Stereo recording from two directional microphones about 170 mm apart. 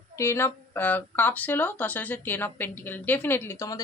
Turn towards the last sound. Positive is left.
turn(degrees=20)  # may be behind; listen again after turning